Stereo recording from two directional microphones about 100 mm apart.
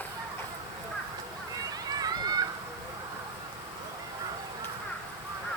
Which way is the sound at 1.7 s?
40° right (ahead or behind).